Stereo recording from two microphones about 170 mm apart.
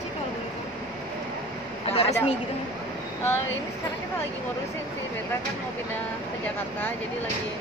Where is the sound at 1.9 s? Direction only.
35° left (ahead or behind).